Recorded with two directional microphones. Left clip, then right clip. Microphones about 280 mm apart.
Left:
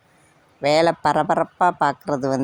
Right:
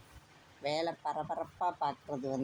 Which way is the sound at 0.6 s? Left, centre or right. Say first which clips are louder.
Left 18 dB; left.